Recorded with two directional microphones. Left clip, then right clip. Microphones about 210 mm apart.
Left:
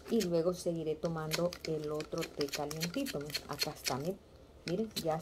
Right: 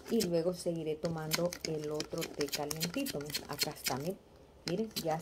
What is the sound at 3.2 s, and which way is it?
A woman's voice, 5° right (ahead or behind).